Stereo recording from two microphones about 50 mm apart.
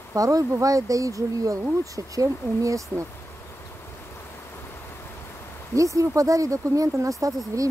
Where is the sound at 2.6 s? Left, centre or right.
Right.